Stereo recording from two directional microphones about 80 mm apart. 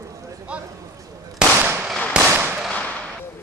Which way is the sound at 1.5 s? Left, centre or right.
Right.